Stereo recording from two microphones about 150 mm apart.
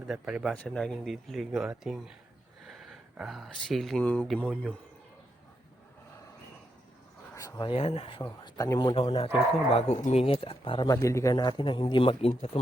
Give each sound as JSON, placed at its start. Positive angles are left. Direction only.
{"t": 0.1, "sound": "speech", "side_deg": -5}
{"t": 0.5, "sound": "speech", "side_deg": 5}
{"t": 7.3, "sound": "speech", "side_deg": 20}
{"t": 7.7, "sound": "speech", "side_deg": 40}
{"t": 10.9, "sound": "speech", "side_deg": 20}